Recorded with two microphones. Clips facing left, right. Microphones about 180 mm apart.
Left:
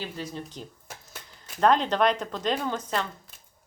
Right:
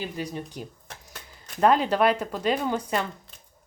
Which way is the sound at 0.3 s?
10° right (ahead or behind).